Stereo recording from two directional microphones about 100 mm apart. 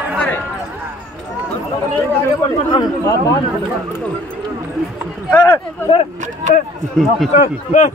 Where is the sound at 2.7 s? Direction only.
45° left (ahead or behind).